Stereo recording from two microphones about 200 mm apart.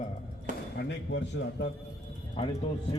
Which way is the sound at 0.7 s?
60° left (ahead or behind).